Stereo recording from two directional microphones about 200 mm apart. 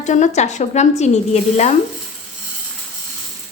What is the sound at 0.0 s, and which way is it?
A woman's voice, 35° left (ahead or behind).